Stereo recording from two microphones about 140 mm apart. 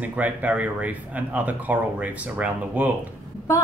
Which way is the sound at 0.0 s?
10° right (ahead or behind).